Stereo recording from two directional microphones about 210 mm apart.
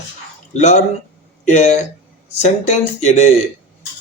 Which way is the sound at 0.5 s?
35° left (ahead or behind).